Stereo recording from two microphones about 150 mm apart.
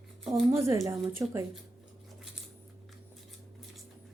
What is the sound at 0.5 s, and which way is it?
Speech, 20° right (ahead or behind).